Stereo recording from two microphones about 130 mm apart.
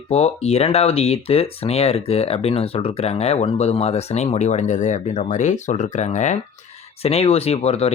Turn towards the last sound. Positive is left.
turn(degrees=50)  # may be behind; listen again after turning